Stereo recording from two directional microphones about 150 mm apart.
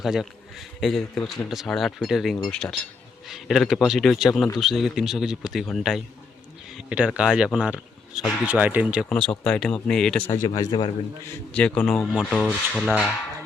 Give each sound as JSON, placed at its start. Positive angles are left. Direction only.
{"t": 0.0, "sound": "speech", "side_deg": -5}
{"t": 9.0, "sound": "speech", "side_deg": 5}
{"t": 10.3, "sound": "speech", "side_deg": 25}
{"t": 11.5, "sound": "speech", "side_deg": 5}